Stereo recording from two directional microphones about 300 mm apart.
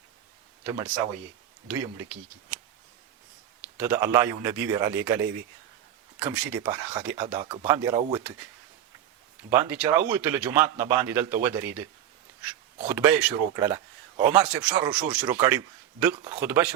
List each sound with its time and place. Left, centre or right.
0.6 s speech: centre
3.8 s speech: centre
6.3 s speech: centre
7.3 s speech: centre
9.5 s speech: centre
12.9 s speech: centre